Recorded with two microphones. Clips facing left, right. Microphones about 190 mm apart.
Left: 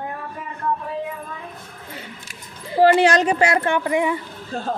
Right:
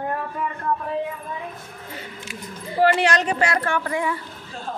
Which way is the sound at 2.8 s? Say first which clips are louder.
Left 4 dB; 35° left (ahead or behind).